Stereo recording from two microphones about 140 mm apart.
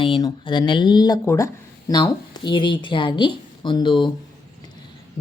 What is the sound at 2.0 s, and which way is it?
Speech, 35° left (ahead or behind).